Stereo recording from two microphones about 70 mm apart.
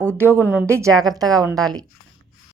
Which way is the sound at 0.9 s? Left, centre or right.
Right.